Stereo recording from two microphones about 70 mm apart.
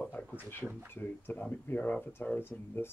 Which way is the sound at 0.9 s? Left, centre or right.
Left.